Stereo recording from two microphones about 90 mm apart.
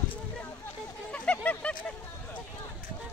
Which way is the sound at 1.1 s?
15° left (ahead or behind).